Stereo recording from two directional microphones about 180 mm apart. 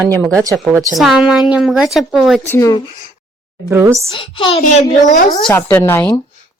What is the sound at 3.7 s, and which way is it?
Speech, 15° right (ahead or behind).